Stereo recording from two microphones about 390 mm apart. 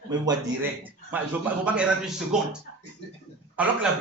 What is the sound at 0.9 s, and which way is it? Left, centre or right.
Speech, centre.